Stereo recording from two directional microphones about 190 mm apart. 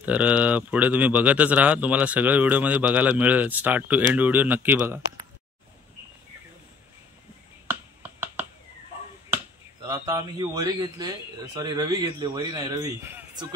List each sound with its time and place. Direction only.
0.0 s speech: 5° right (ahead or behind)
9.8 s a man's voice: 20° right (ahead or behind)